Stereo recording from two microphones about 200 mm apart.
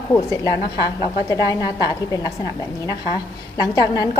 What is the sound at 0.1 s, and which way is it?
A woman's voice, 15° left (ahead or behind).